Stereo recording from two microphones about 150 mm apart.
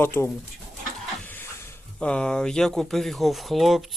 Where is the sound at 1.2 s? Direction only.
15° left (ahead or behind).